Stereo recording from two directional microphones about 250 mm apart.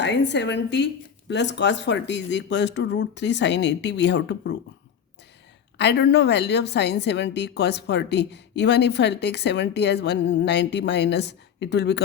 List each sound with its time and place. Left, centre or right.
0.0 s a woman's voice: left
5.7 s a woman's voice: left